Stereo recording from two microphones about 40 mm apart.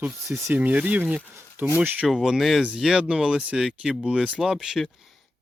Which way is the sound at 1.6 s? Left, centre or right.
Right.